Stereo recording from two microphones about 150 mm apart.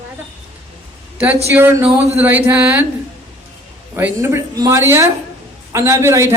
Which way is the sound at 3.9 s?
15° right (ahead or behind).